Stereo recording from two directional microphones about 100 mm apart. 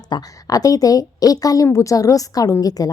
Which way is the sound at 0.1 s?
40° left (ahead or behind).